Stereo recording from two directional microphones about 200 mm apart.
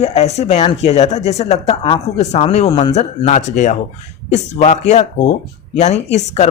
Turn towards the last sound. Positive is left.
turn(degrees=35)  # may be behind; listen again after turning